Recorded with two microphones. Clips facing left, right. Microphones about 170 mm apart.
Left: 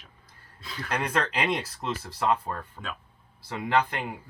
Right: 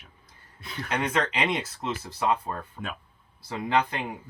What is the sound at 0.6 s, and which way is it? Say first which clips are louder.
Speech: right 1 dB; 25° right (ahead or behind).